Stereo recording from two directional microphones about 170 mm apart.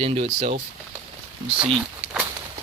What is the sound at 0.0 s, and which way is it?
Speech, 35° right (ahead or behind).